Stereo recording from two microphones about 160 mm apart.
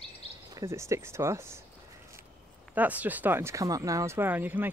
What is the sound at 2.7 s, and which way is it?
Speech, 10° right (ahead or behind).